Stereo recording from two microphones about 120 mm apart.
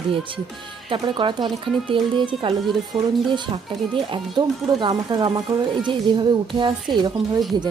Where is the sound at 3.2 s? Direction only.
40° right (ahead or behind).